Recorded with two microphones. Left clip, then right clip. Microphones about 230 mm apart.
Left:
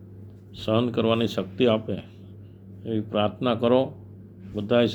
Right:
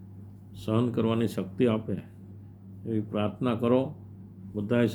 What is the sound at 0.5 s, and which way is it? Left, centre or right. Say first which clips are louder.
Speech: left 5 dB; centre.